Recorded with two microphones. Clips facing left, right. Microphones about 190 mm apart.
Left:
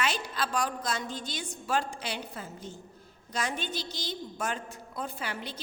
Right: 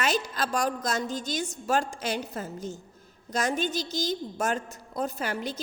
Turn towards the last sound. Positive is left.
turn(degrees=-45)  # may be behind; listen again after turning